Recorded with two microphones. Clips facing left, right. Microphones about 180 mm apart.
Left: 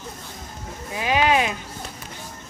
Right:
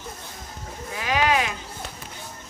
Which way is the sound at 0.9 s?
20° left (ahead or behind).